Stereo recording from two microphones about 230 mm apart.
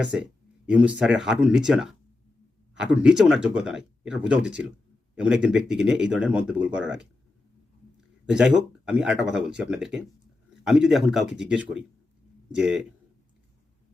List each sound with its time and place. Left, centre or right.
0.0 s speech: centre
8.3 s speech: centre